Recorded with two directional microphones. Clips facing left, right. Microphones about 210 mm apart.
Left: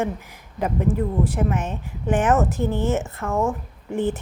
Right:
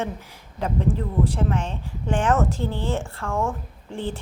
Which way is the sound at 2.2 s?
15° left (ahead or behind).